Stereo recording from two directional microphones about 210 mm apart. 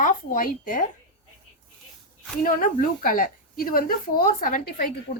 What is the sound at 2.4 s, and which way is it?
A woman's voice, 40° left (ahead or behind).